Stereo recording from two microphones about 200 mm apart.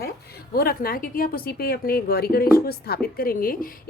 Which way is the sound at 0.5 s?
50° left (ahead or behind).